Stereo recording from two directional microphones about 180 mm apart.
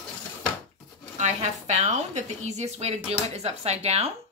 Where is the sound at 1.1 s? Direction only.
40° right (ahead or behind).